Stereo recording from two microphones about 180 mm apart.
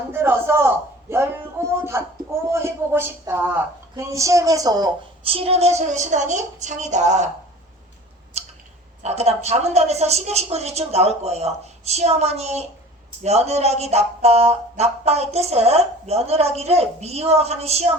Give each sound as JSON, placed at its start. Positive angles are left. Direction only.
{"t": 0.1, "sound": "a woman's voice", "side_deg": -10}
{"t": 8.4, "sound": "a sound", "side_deg": -35}
{"t": 9.0, "sound": "a woman's voice", "side_deg": -35}